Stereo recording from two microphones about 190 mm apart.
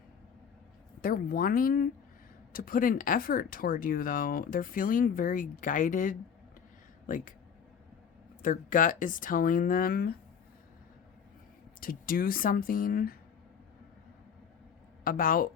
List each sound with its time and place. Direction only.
1.0 s speech: 50° left (ahead or behind)
8.4 s speech: 45° left (ahead or behind)
11.8 s speech: 50° left (ahead or behind)
15.0 s speech: 50° left (ahead or behind)